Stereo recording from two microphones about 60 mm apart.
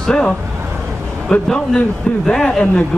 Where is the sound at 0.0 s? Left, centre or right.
Centre.